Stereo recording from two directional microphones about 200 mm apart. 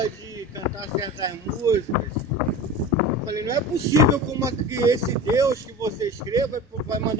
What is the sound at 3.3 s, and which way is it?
Speech, 15° right (ahead or behind).